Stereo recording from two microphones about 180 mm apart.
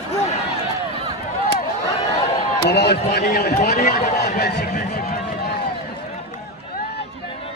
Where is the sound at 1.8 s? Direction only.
35° left (ahead or behind).